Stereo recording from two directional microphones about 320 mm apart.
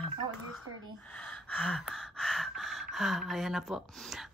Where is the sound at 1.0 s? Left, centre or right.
Centre.